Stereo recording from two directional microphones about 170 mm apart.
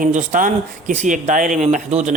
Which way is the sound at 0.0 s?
45° right (ahead or behind).